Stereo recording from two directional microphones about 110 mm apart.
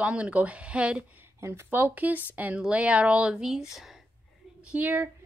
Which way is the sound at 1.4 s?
25° right (ahead or behind).